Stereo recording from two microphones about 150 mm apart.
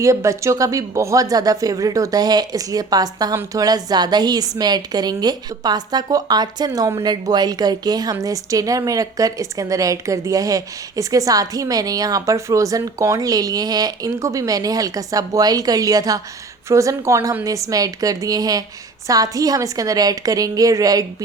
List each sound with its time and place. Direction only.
0.0 s a woman's voice: 20° right (ahead or behind)